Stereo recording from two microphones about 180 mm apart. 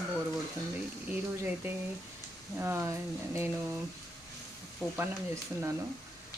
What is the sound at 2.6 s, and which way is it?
Speech, 15° right (ahead or behind).